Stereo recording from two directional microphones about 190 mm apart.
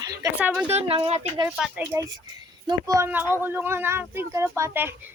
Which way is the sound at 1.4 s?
5° right (ahead or behind).